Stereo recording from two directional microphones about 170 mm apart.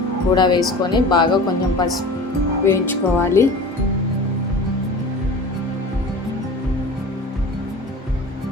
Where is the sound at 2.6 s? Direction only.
15° left (ahead or behind).